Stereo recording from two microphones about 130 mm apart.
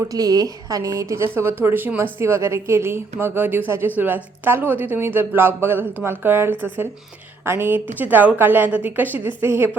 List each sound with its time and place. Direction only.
0.1 s a woman's voice: 30° right (ahead or behind)